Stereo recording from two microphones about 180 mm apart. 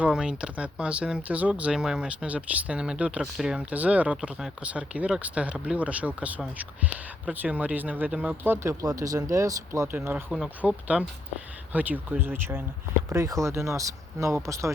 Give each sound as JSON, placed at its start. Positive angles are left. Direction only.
{"t": 0.0, "sound": "speech", "side_deg": -5}